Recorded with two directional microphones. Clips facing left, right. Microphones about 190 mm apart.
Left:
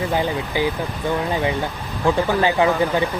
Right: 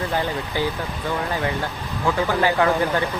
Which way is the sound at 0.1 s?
15° left (ahead or behind).